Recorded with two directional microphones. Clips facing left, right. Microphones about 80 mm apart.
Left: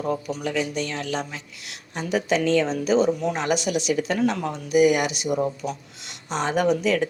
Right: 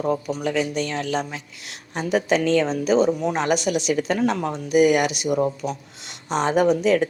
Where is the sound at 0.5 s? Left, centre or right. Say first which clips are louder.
Right 2 dB; right.